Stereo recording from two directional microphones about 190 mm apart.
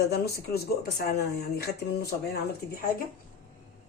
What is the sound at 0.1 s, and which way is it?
Speech, 55° left (ahead or behind).